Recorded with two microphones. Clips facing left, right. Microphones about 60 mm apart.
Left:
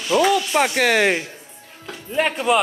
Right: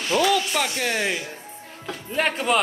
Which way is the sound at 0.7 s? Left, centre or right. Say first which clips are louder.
Left 8 dB; left.